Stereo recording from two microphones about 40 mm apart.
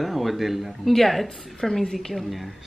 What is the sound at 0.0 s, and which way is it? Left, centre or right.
A man's voice, centre.